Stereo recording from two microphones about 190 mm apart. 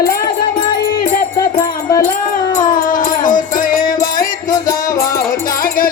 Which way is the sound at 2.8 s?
45° left (ahead or behind).